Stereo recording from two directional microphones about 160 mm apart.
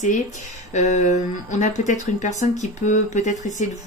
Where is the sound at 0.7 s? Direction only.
45° left (ahead or behind).